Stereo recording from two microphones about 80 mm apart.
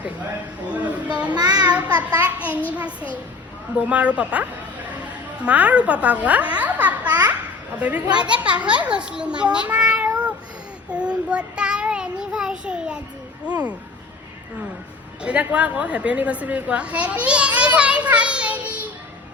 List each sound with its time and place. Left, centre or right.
0.7 s a woman's voice: centre
1.4 s a child's voice: right
2.0 s a child's voice: centre
3.8 s a woman's voice: centre
5.5 s a woman's voice: centre
10.9 s child singing: centre
15.2 s a woman's voice: centre